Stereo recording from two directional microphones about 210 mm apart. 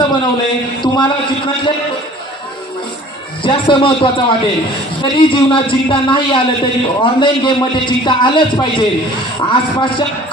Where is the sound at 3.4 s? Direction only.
25° left (ahead or behind).